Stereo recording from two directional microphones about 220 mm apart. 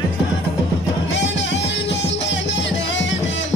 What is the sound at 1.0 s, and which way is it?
Music, 55° left (ahead or behind).